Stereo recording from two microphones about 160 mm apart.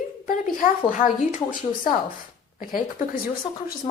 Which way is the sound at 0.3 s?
60° left (ahead or behind).